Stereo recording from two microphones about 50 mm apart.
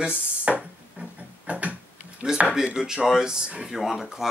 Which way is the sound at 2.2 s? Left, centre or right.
Centre.